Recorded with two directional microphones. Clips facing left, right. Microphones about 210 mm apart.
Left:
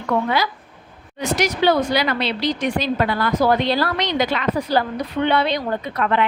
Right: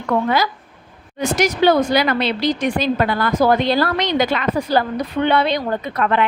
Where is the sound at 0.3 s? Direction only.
45° right (ahead or behind).